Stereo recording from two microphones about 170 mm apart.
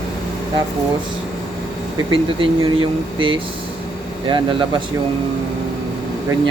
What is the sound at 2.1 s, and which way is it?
A man's voice, 30° right (ahead or behind).